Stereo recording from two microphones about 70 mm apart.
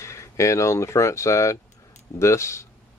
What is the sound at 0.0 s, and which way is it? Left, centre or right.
Speech, left.